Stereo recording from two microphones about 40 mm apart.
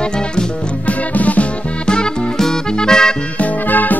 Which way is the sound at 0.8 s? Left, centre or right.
Left.